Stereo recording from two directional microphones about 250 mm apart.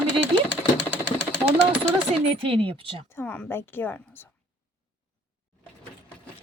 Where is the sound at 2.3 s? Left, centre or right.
Right.